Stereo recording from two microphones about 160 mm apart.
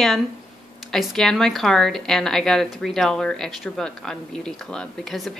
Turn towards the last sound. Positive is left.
turn(degrees=0)  # may be behind; listen again after turning